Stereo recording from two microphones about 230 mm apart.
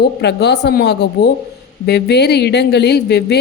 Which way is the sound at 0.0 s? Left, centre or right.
Left.